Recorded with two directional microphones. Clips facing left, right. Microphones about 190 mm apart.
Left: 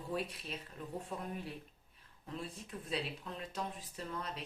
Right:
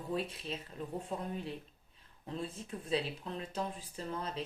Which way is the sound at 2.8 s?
30° right (ahead or behind).